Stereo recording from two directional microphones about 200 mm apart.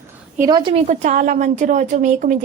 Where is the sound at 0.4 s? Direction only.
20° right (ahead or behind).